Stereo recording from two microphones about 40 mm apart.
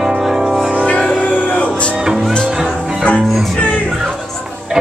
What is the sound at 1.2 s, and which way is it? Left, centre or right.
Music, left.